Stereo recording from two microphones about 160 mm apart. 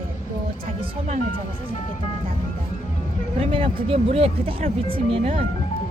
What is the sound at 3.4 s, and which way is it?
Speech, 35° right (ahead or behind).